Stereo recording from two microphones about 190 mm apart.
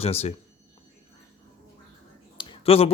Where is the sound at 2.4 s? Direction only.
30° left (ahead or behind).